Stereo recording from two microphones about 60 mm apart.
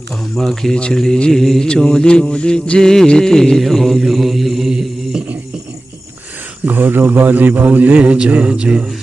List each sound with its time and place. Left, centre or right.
0.3 s mantra: centre
6.7 s a man's voice: right